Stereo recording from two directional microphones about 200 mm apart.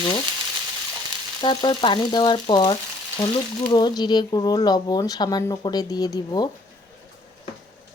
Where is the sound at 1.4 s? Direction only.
25° left (ahead or behind).